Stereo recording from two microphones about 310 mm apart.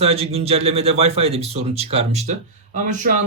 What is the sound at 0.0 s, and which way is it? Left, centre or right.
Speech, centre.